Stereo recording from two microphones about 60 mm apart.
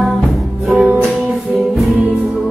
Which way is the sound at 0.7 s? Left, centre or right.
Right.